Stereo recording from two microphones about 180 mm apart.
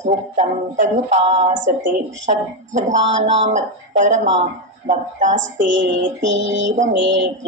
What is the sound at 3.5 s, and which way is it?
Music, 45° right (ahead or behind).